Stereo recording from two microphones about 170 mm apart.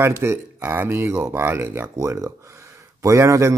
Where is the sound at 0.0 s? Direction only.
15° right (ahead or behind).